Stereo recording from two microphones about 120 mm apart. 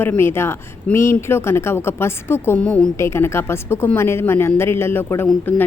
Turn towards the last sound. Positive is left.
turn(degrees=15)  # may be behind; listen again after turning